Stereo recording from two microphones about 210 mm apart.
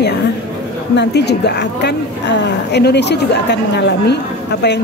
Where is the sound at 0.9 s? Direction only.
50° left (ahead or behind).